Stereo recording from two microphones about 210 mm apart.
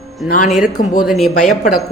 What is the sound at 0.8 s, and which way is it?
Speech, 40° left (ahead or behind).